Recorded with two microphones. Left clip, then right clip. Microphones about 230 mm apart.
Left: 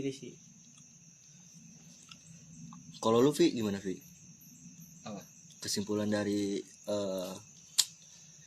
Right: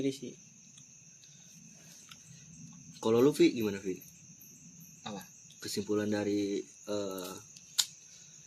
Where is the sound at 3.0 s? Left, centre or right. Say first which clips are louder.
Right 1 dB; left.